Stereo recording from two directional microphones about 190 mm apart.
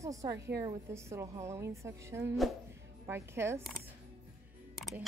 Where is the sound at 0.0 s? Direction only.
15° right (ahead or behind).